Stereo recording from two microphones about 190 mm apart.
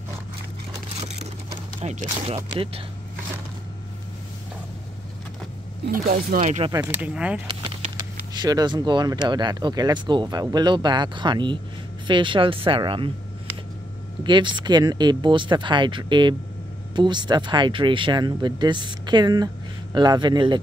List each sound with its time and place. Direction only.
1.0 s vehicle: 35° right (ahead or behind)
1.5 s a sound: 30° right (ahead or behind)
2.2 s speech: 30° right (ahead or behind)
5.9 s speech: 45° right (ahead or behind)
6.7 s speech: 10° right (ahead or behind)
8.3 s speech: 20° right (ahead or behind)
14.2 s speech: 25° right (ahead or behind)